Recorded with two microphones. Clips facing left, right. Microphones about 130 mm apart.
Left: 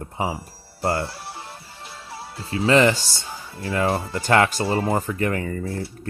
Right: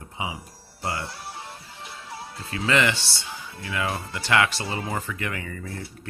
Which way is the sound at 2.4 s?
30° left (ahead or behind).